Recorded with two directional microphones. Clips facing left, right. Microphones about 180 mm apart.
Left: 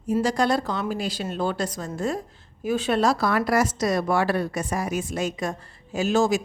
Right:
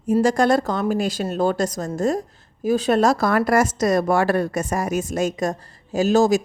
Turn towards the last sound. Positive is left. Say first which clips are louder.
# right 5 dB
turn(degrees=-40)  # may be behind; listen again after turning